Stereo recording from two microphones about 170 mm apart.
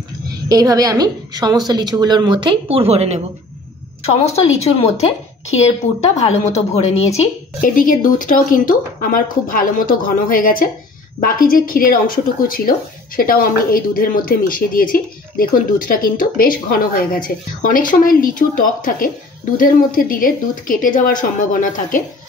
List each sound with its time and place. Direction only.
0.5 s speech: 20° right (ahead or behind); by 3.3 s 40° right (ahead or behind)
4.6 s a woman's voice: 35° left (ahead or behind)
6.2 s a woman's voice: 40° left (ahead or behind)
7.7 s a woman's voice: 55° left (ahead or behind)